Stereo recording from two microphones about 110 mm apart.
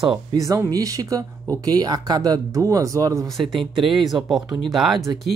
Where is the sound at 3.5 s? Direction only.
Centre (ahead or behind).